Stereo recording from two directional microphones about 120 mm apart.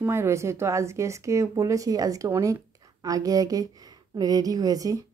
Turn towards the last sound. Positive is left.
turn(degrees=-30)  # may be behind; listen again after turning